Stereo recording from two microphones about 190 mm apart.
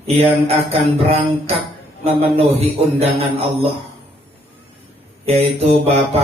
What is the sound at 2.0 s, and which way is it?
Mantra, 30° right (ahead or behind).